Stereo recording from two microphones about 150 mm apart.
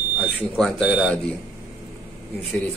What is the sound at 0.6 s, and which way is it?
Speech, 5° left (ahead or behind).